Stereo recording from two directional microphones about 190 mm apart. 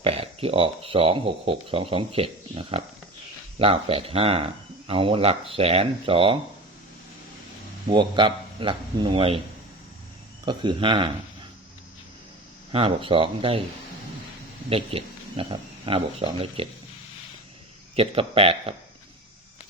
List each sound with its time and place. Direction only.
0.0 s speech: 30° right (ahead or behind)
7.9 s a man's voice: 25° right (ahead or behind)
10.4 s a man's voice: 25° right (ahead or behind)
12.7 s a man's voice: 30° right (ahead or behind)
14.7 s speech: 30° right (ahead or behind)
17.9 s a man's voice: 30° right (ahead or behind)